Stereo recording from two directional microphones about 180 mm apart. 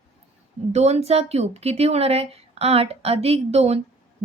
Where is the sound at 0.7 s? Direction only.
35° right (ahead or behind).